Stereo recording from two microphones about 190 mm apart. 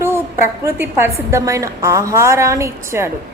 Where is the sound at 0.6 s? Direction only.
10° right (ahead or behind).